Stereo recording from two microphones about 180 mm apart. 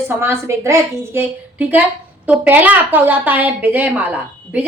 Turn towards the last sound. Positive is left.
turn(degrees=-10)  # may be behind; listen again after turning